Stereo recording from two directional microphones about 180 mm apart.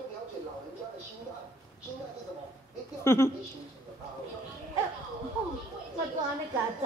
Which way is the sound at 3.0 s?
15° left (ahead or behind).